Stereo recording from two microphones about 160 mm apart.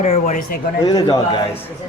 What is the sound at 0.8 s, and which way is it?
Speech, 25° left (ahead or behind).